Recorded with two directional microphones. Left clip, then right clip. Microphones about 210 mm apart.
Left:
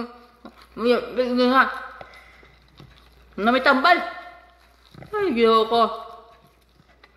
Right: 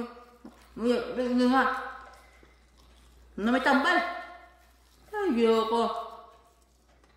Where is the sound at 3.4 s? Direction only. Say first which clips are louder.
Left 7 dB; 20° right (ahead or behind).